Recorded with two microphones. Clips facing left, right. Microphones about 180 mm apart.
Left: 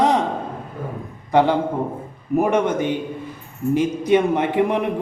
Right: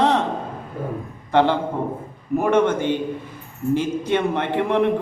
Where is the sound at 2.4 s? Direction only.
15° left (ahead or behind).